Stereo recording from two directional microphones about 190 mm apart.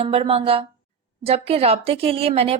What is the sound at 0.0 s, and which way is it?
A woman's voice, 30° right (ahead or behind).